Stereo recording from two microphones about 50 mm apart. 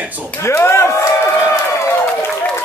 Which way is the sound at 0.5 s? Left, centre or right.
Left.